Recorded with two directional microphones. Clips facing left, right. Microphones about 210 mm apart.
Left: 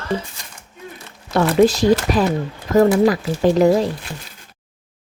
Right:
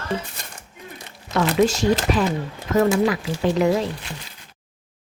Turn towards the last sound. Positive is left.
turn(degrees=35)  # may be behind; listen again after turning